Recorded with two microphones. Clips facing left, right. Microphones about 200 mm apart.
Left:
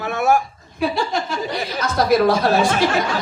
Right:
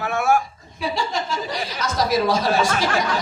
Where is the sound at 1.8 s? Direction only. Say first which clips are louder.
Left 5 dB; 55° left (ahead or behind).